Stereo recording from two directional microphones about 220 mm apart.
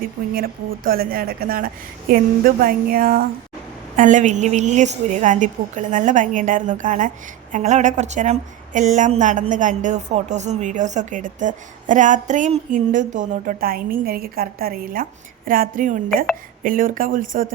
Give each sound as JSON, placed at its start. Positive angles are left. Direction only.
{"t": 0.0, "sound": "a woman's voice", "side_deg": -40}